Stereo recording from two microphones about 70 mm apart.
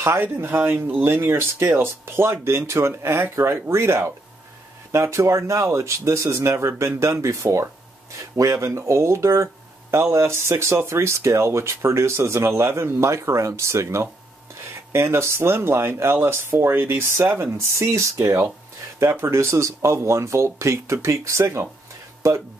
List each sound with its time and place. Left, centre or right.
0.0 s speech: right
17.4 s speech: right